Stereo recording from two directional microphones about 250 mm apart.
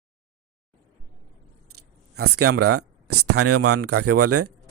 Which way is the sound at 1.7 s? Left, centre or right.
Right.